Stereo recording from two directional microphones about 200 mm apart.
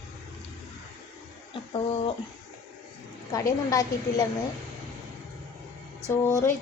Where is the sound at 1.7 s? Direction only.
30° left (ahead or behind).